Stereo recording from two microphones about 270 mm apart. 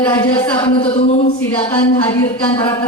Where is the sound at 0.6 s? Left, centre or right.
Centre.